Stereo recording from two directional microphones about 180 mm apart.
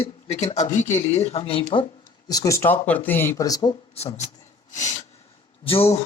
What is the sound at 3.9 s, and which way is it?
Speech, 35° left (ahead or behind).